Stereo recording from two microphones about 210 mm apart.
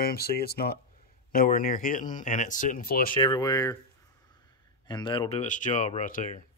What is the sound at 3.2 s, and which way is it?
Speech, 20° left (ahead or behind).